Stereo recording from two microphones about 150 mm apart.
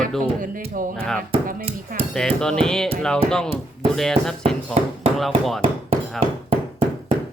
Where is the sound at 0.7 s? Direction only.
65° right (ahead or behind).